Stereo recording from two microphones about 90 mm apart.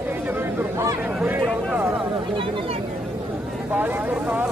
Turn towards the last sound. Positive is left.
turn(degrees=-20)  # may be behind; listen again after turning